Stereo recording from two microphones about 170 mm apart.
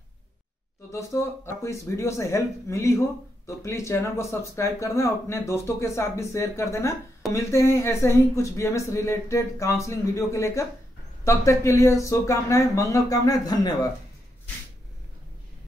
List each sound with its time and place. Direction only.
0.9 s speech: 15° left (ahead or behind)